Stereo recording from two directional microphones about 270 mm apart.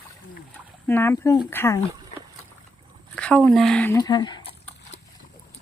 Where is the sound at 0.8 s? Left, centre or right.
Centre.